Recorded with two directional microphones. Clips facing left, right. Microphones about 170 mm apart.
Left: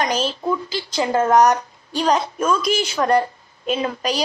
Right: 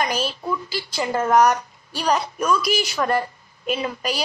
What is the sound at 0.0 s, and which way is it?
Speech, 10° right (ahead or behind).